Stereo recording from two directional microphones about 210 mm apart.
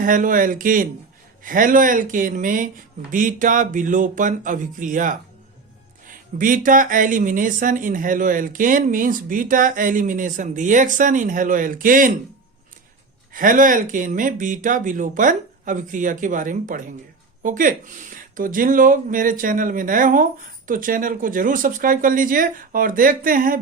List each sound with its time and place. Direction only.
0.0 s speech: 40° right (ahead or behind)
13.3 s speech: 40° right (ahead or behind)